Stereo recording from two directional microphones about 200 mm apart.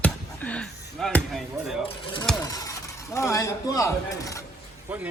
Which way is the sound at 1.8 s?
25° left (ahead or behind).